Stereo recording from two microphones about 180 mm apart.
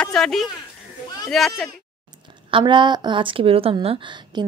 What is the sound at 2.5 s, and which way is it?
A woman's voice, 25° right (ahead or behind).